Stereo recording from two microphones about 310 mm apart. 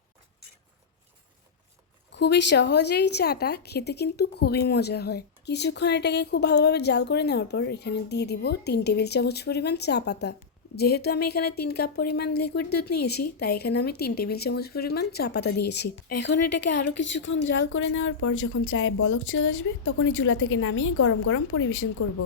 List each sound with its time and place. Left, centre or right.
2.1 s a woman's voice: left